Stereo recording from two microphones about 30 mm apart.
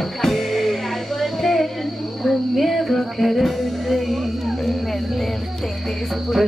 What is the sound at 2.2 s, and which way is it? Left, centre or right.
Music, centre.